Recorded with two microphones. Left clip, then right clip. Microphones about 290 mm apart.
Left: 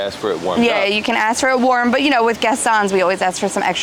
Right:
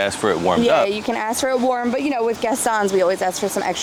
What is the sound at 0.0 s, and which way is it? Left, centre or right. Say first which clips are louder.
Speech: right 1 dB; right.